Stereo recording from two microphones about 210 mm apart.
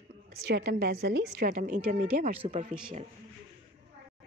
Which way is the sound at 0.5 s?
50° right (ahead or behind).